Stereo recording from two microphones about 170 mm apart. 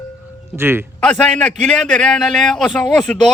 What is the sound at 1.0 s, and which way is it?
A man's voice, 5° left (ahead or behind).